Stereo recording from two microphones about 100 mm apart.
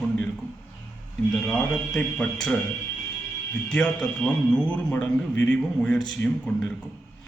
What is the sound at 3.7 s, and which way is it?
A man's voice, 10° left (ahead or behind).